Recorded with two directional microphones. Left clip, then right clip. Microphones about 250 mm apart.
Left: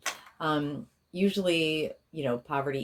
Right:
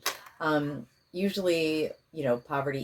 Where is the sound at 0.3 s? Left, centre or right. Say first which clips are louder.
Right 1 dB; left.